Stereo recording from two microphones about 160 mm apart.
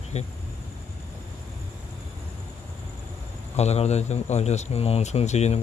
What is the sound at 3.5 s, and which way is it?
Speech, 40° left (ahead or behind).